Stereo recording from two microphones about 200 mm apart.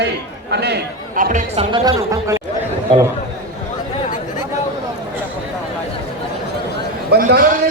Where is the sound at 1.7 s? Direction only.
15° right (ahead or behind).